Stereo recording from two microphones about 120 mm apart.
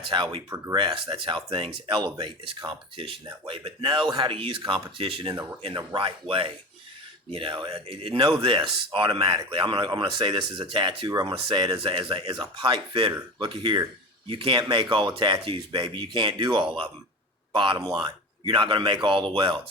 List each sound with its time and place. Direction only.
0.1 s speech: 45° right (ahead or behind)
0.5 s speech: 25° right (ahead or behind)
0.9 s speech: 45° right (ahead or behind)